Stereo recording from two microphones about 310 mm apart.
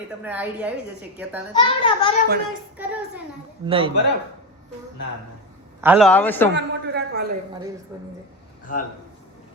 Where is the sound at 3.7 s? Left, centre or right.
Centre.